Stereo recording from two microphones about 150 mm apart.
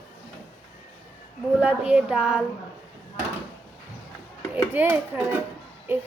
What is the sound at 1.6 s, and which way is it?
Speech, 10° right (ahead or behind).